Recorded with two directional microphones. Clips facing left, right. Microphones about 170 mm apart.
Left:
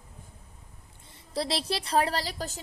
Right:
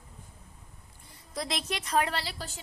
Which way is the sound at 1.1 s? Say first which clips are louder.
Left 4 dB; 30° left (ahead or behind).